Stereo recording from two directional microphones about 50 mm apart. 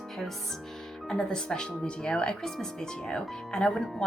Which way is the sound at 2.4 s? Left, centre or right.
Centre.